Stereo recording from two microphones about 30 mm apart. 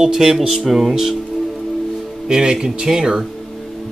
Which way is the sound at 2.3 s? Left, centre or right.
Right.